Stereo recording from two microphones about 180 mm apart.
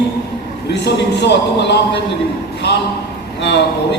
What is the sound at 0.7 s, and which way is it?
A man's voice, 70° left (ahead or behind).